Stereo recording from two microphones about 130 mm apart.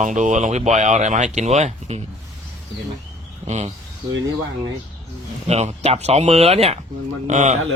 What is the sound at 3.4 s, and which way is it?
Speech, 60° right (ahead or behind).